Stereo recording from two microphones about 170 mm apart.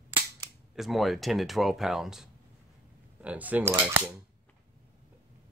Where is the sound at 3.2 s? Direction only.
10° right (ahead or behind).